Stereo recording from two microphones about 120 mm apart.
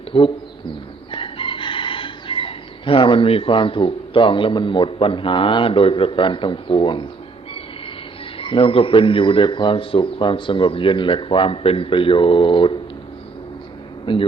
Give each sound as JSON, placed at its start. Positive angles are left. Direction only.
{"t": 0.1, "sound": "speech", "side_deg": 45}
{"t": 1.1, "sound": "chicken", "side_deg": 45}
{"t": 8.4, "sound": "speech", "side_deg": 45}
{"t": 14.0, "sound": "a man's voice", "side_deg": 50}